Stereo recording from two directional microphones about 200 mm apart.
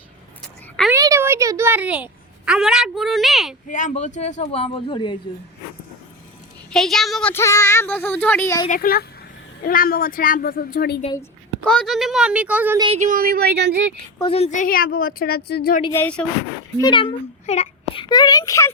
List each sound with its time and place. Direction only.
0.9 s a woman's voice: 15° right (ahead or behind)
3.7 s speech: 40° left (ahead or behind); by 5.1 s 25° left (ahead or behind)
6.7 s speech: centre (ahead or behind)
8.7 s a woman's voice: 45° left (ahead or behind)
11.1 s a woman's voice: 10° left (ahead or behind); by 12.8 s 10° right (ahead or behind)
13.0 s speech: 45° right (ahead or behind)
14.2 s a woman's voice: 30° left (ahead or behind); by 15.8 s 50° left (ahead or behind)
15.9 s speech: 10° left (ahead or behind)
16.7 s a sound: 20° left (ahead or behind)
18.1 s a child's voice: 20° left (ahead or behind)